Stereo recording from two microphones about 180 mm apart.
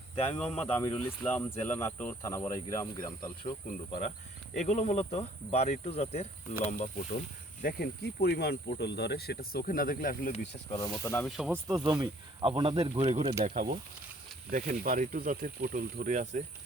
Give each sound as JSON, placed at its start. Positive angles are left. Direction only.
{"t": 0.3, "sound": "speech", "side_deg": 5}
{"t": 4.5, "sound": "cricket", "side_deg": 40}
{"t": 6.9, "sound": "speech", "side_deg": 45}
{"t": 10.8, "sound": "speech", "side_deg": 20}
{"t": 11.3, "sound": "speech", "side_deg": -5}
{"t": 11.5, "sound": "speech", "side_deg": -20}
{"t": 13.4, "sound": "speech", "side_deg": -50}